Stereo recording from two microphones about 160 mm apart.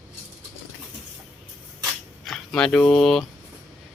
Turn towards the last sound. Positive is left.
turn(degrees=0)  # may be behind; listen again after turning